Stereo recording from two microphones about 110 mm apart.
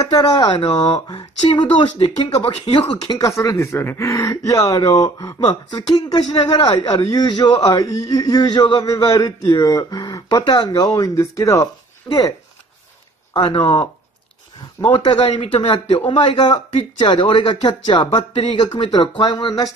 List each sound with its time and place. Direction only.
0.0 s speech: 35° left (ahead or behind)
0.6 s speech: 50° left (ahead or behind)
3.2 s speech: 30° left (ahead or behind)
10.7 s speech: 30° left (ahead or behind)
13.3 s speech: 45° left (ahead or behind)
15.0 s speech: 40° left (ahead or behind)